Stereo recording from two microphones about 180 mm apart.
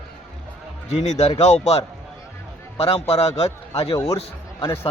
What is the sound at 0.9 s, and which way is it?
A man's voice, 35° left (ahead or behind).